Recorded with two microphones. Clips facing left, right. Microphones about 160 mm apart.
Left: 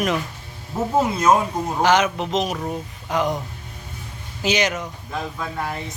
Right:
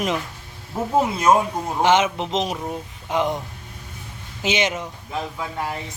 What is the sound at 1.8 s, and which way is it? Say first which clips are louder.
Speech: even; 25° right (ahead or behind).